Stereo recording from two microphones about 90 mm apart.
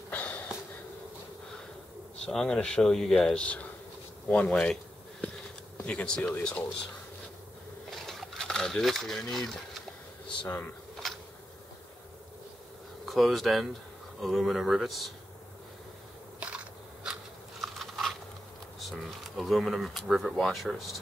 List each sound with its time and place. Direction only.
0.1 s a sound: 15° left (ahead or behind)
2.2 s speech: 10° left (ahead or behind)
5.9 s speech: 10° left (ahead or behind)
7.9 s a sound: centre (ahead or behind)
13.0 s speech: centre (ahead or behind)
16.3 s biting: 15° right (ahead or behind)
18.8 s speech: centre (ahead or behind)